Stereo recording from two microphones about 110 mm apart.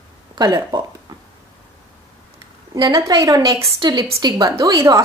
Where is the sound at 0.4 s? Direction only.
35° right (ahead or behind).